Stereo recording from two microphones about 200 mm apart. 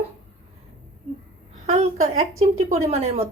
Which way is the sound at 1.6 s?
35° right (ahead or behind).